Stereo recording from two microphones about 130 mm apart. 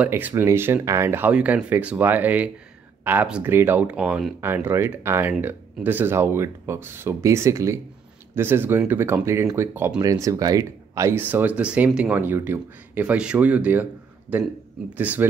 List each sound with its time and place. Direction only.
0.0 s speech: 15° right (ahead or behind)
10.0 s speech: 25° right (ahead or behind)